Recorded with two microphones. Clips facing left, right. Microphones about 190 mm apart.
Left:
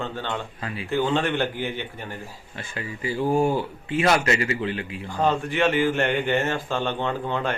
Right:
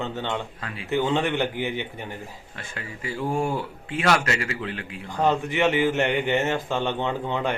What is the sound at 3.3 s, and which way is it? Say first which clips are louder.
Speech: left 4 dB; 25° left (ahead or behind).